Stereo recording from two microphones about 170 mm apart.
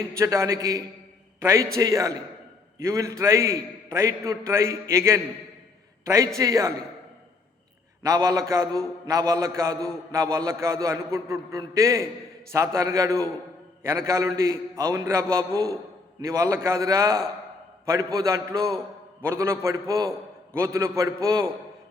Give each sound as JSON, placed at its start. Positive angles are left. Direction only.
{"t": 0.2, "sound": "a man's voice", "side_deg": -15}
{"t": 8.0, "sound": "a man's voice", "side_deg": -20}